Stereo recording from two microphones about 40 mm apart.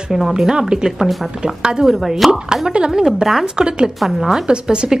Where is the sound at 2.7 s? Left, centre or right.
Right.